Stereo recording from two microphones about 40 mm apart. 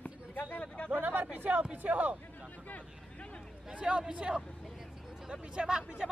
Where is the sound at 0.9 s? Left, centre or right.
Right.